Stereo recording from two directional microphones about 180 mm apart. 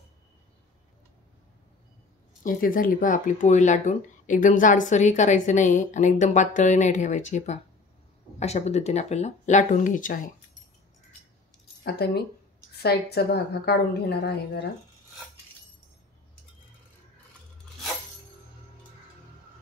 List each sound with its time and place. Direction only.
2.4 s speech: 50° left (ahead or behind)
11.8 s a woman's voice: 65° left (ahead or behind)